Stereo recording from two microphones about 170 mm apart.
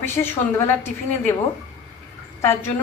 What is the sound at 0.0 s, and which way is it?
Speech, 15° left (ahead or behind).